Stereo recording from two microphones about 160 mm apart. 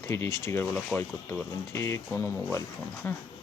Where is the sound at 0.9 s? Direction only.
Centre (ahead or behind).